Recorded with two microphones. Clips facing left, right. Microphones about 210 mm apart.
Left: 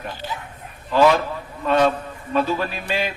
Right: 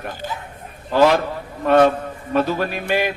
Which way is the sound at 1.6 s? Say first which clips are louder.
Right 4 dB; 55° right (ahead or behind).